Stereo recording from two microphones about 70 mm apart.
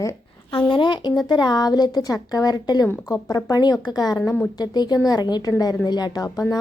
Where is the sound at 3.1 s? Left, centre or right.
Left.